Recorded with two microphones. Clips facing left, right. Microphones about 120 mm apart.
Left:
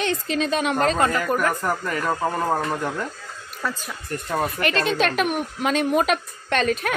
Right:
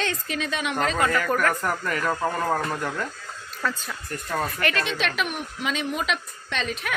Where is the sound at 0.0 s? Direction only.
30° left (ahead or behind).